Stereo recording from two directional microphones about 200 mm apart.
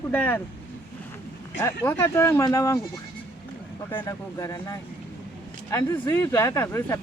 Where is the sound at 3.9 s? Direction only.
15° left (ahead or behind).